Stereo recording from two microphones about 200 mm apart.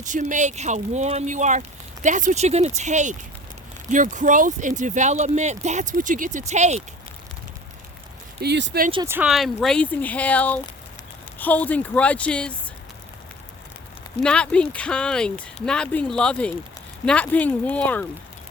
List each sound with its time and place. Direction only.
0.0 s speech: 40° right (ahead or behind)
8.4 s speech: 60° right (ahead or behind)
9.0 s speech: 5° right (ahead or behind)
14.2 s speech: 5° left (ahead or behind)